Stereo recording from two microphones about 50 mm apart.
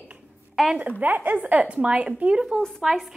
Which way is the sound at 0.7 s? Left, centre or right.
Right.